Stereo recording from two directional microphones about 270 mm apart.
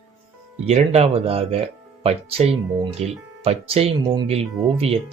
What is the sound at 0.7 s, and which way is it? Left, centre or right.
Speech, right.